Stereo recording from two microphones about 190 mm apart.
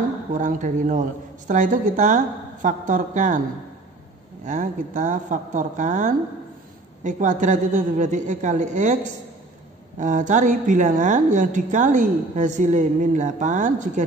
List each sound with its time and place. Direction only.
0.3 s a woman's voice: 40° right (ahead or behind)
4.5 s a woman's voice: 40° right (ahead or behind)